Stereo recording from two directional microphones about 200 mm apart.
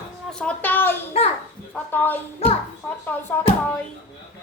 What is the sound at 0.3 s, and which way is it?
A child's voice, 5° left (ahead or behind).